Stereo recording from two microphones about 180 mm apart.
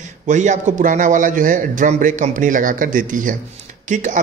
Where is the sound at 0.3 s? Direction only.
40° right (ahead or behind).